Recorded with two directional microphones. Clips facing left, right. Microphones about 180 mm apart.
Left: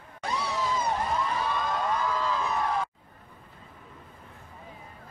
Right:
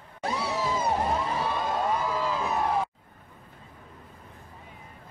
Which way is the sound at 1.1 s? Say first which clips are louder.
Right 1 dB; 30° right (ahead or behind).